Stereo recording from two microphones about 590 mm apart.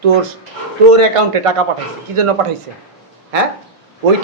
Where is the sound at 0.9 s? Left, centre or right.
Right.